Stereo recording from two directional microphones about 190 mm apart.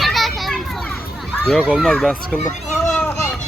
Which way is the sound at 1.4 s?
Centre (ahead or behind).